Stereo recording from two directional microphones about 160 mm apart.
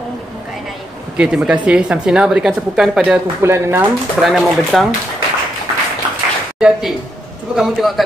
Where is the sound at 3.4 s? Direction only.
15° right (ahead or behind).